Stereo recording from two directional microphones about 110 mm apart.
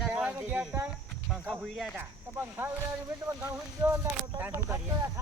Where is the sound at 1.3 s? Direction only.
Centre (ahead or behind).